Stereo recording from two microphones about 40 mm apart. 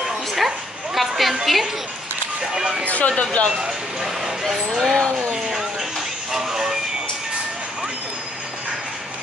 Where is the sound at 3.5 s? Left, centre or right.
Centre.